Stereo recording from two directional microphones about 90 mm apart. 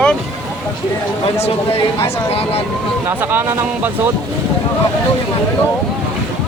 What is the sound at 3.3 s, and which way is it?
Speech, 20° right (ahead or behind).